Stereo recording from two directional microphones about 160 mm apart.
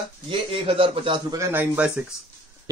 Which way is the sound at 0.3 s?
35° right (ahead or behind).